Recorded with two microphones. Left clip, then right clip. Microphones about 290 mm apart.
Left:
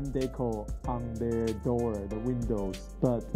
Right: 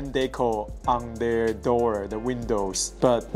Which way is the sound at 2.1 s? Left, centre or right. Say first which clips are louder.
Right 6 dB; centre.